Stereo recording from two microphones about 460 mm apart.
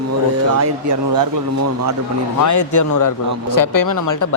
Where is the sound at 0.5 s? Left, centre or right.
Right.